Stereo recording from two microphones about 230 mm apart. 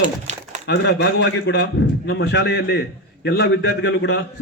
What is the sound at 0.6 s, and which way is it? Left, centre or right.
A man's voice, left.